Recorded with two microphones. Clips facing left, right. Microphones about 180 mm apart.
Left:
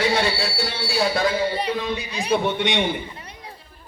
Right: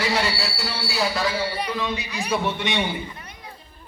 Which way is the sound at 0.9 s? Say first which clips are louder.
Left 3 dB; 55° left (ahead or behind).